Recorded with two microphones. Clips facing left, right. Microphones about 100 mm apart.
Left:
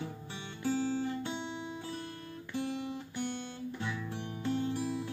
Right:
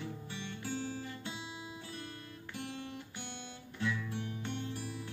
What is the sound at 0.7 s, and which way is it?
Music, 30° left (ahead or behind).